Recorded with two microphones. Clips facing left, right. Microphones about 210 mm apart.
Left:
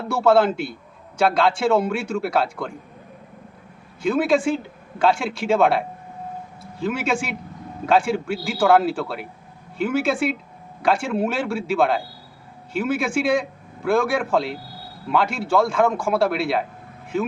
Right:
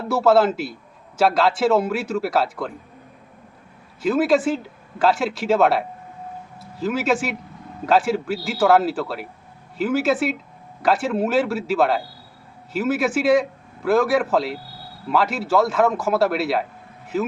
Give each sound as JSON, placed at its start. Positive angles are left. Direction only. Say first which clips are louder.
{"t": 0.1, "sound": "speech", "louder": "right 1 dB", "side_deg": -5}
{"t": 4.0, "sound": "speech", "louder": "right 1 dB", "side_deg": -5}